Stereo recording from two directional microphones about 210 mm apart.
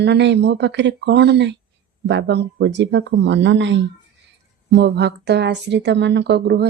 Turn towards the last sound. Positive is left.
turn(degrees=-50)  # may be behind; listen again after turning